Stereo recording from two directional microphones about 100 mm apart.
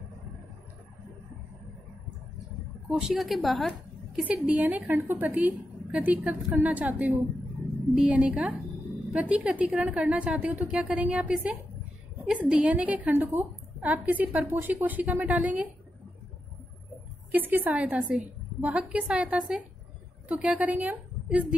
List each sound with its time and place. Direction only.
2.9 s a woman's voice: 5° right (ahead or behind)
3.7 s a woman's voice: 15° right (ahead or behind)
17.3 s a woman's voice: 20° right (ahead or behind)